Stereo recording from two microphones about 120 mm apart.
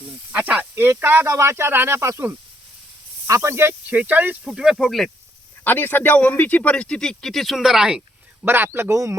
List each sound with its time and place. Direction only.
0.3 s speech: 10° right (ahead or behind)
5.6 s speech: 15° left (ahead or behind); by 8.0 s 5° right (ahead or behind)
8.4 s speech: 20° right (ahead or behind)